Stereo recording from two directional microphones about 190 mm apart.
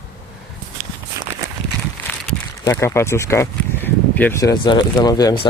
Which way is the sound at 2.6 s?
15° left (ahead or behind).